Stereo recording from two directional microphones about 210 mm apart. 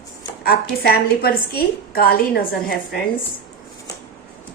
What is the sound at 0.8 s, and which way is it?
A woman's voice, 45° left (ahead or behind).